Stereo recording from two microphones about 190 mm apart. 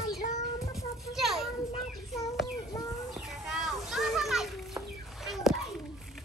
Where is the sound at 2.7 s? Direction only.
15° left (ahead or behind).